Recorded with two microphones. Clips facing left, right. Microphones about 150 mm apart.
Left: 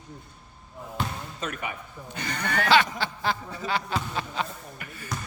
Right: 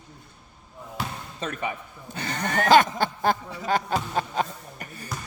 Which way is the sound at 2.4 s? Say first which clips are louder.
Right 4 dB; 45° right (ahead or behind).